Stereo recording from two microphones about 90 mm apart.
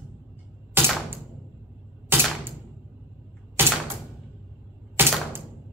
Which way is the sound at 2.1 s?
25° right (ahead or behind).